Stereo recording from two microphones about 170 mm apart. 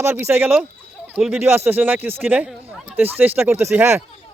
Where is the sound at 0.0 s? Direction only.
15° right (ahead or behind).